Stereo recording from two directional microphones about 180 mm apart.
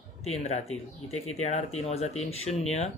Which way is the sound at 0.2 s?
35° left (ahead or behind).